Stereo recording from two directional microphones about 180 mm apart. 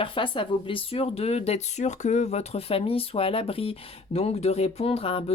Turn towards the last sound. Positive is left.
turn(degrees=30)  # may be behind; listen again after turning